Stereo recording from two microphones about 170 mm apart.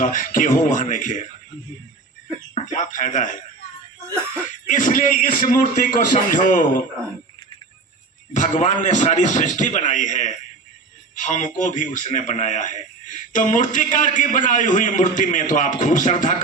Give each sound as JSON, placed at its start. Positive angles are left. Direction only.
{"t": 0.0, "sound": "a man's voice", "side_deg": 50}
{"t": 2.6, "sound": "a man's voice", "side_deg": 45}
{"t": 4.1, "sound": "a sound", "side_deg": -10}
{"t": 4.7, "sound": "a man's voice", "side_deg": 50}
{"t": 8.3, "sound": "a man's voice", "side_deg": 45}